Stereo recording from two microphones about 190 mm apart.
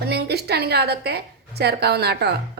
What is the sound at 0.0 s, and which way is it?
A woman's voice, 60° right (ahead or behind).